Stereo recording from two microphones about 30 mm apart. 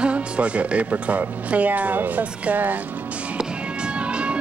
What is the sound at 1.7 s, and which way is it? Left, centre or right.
Speech, right.